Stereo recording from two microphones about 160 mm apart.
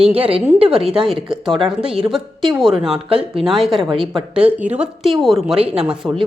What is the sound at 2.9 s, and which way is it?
Speech, 35° right (ahead or behind).